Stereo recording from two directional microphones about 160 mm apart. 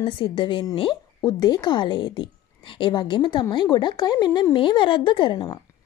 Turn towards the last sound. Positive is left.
turn(degrees=30)  # may be behind; listen again after turning